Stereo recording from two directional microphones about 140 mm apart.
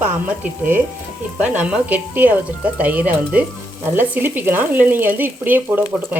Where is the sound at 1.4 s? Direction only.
10° right (ahead or behind).